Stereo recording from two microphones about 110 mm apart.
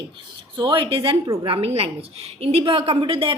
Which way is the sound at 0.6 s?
45° right (ahead or behind).